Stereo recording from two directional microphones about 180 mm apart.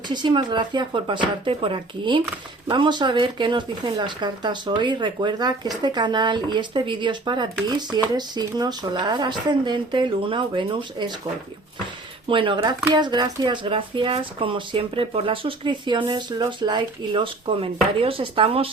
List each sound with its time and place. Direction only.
0.1 s speech: 25° right (ahead or behind)
12.3 s speech: 25° right (ahead or behind)